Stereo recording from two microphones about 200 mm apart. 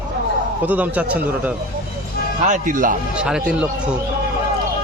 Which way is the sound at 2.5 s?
40° right (ahead or behind).